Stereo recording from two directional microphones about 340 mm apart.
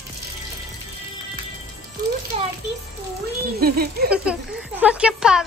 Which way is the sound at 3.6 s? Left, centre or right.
Right.